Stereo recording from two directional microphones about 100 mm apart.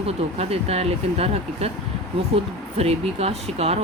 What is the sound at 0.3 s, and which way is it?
Speech, 90° right.